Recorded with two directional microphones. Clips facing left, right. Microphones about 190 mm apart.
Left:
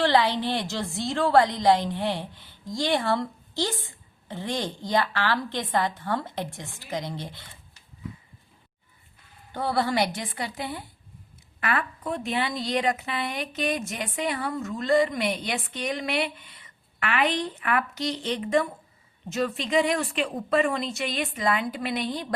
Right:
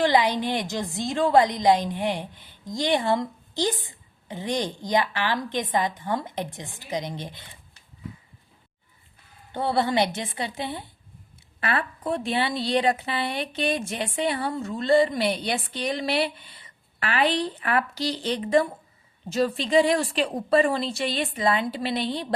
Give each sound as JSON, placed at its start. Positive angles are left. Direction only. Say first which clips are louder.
{"t": 0.0, "sound": "a woman's voice", "louder": "right 1 dB", "side_deg": -15}
{"t": 9.5, "sound": "a woman's voice", "louder": "right 2 dB", "side_deg": -25}